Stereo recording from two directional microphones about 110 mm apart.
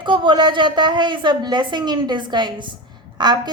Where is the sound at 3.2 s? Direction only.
40° right (ahead or behind).